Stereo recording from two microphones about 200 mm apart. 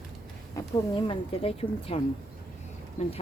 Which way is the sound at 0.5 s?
25° left (ahead or behind).